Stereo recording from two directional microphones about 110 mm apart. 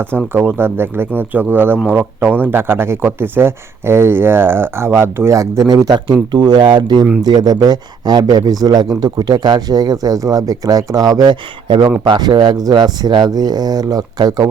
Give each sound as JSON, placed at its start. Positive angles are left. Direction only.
{"t": 0.3, "sound": "speech", "side_deg": -20}